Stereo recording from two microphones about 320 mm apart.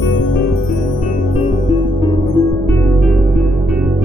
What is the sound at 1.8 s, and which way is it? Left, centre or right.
Music, centre.